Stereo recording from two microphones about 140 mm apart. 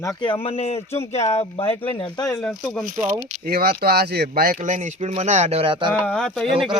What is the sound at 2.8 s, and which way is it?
Speech, 90° right.